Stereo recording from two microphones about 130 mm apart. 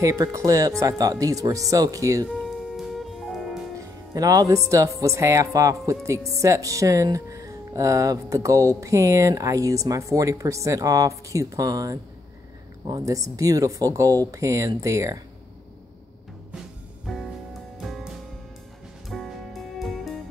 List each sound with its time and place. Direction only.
0.0 s speech: 25° right (ahead or behind)
2.2 s music: centre (ahead or behind)
4.1 s speech: 25° right (ahead or behind)
17.0 s music: centre (ahead or behind)